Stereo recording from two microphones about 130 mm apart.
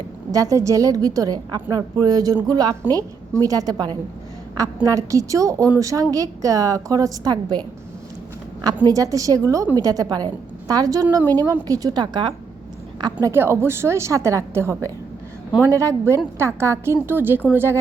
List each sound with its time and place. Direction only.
0.3 s a woman's voice: 25° right (ahead or behind)
8.6 s a woman's voice: 30° right (ahead or behind)
13.3 s a woman's voice: 20° right (ahead or behind)